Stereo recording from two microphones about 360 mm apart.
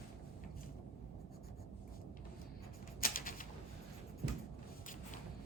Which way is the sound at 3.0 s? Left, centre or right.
Left.